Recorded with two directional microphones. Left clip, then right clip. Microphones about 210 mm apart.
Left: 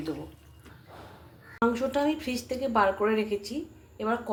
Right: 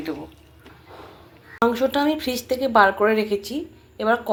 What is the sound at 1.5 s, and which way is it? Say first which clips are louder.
Speech: right 7 dB; 20° right (ahead or behind).